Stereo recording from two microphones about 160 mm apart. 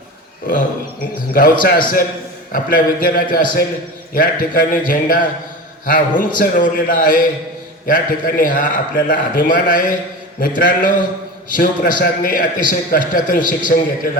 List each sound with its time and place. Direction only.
1.3 s a man's voice: 60° left (ahead or behind)